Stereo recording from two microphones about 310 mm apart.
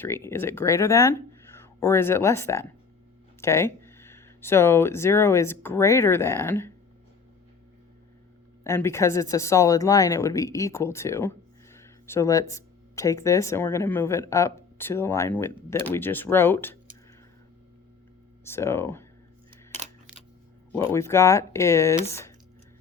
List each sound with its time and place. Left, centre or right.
0.0 s speech: centre
8.6 s speech: centre
18.4 s speech: centre
19.5 s camera: right
20.7 s speech: centre